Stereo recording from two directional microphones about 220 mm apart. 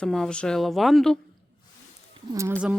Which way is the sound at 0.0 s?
5° left (ahead or behind).